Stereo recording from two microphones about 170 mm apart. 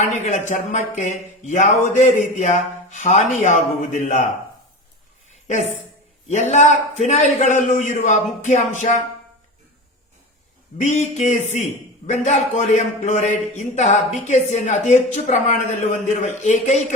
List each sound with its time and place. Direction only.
0.1 s a man's voice: 45° left (ahead or behind)
5.3 s a sound: 45° left (ahead or behind)
6.2 s a man's voice: 40° left (ahead or behind)
10.8 s a man's voice: 45° left (ahead or behind)